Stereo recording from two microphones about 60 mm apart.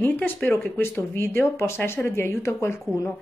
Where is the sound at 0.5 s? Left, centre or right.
Left.